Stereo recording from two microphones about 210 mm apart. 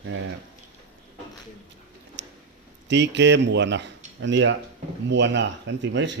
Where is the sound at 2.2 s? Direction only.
60° right (ahead or behind).